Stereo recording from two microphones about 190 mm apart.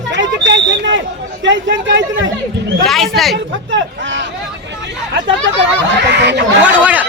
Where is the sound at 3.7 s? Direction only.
75° right (ahead or behind).